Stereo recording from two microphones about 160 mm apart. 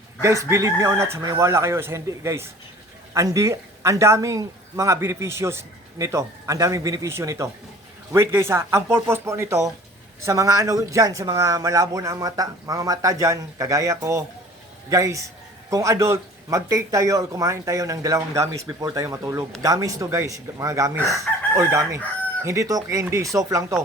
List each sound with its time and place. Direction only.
0.2 s speech: 20° right (ahead or behind)